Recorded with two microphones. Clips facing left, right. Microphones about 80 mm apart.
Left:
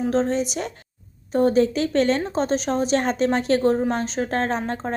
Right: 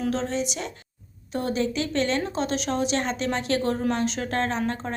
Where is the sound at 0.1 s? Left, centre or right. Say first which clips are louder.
Left 5 dB; left.